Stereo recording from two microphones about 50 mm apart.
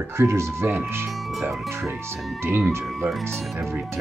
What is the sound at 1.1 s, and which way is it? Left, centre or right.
Speech, centre.